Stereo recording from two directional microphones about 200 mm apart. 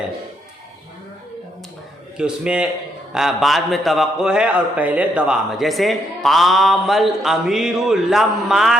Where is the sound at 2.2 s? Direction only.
5° right (ahead or behind).